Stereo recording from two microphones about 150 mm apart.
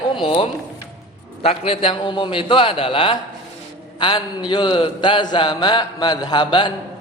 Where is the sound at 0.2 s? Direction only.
40° left (ahead or behind).